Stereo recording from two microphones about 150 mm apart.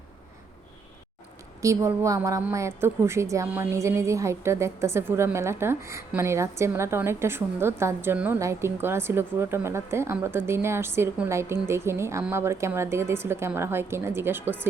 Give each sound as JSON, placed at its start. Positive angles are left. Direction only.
{"t": 1.6, "sound": "a woman's voice", "side_deg": -20}